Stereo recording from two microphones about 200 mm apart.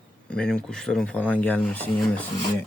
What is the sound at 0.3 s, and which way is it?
Speech, 5° left (ahead or behind).